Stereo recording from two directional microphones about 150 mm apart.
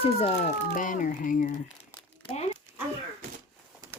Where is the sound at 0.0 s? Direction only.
45° left (ahead or behind); by 1.5 s 65° left (ahead or behind).